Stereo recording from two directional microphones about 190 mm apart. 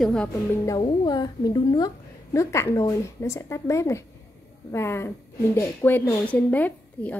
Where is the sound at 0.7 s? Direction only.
20° left (ahead or behind).